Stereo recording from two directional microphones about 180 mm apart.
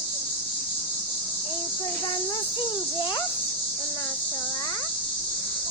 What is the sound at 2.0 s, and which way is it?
A child's voice, 25° left (ahead or behind).